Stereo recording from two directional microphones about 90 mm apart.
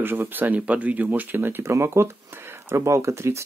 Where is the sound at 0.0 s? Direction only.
25° right (ahead or behind).